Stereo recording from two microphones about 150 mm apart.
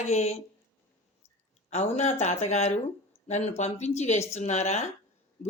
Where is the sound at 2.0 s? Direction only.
45° left (ahead or behind).